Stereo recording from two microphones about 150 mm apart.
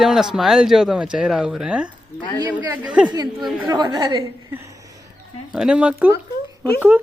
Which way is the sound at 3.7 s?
30° right (ahead or behind).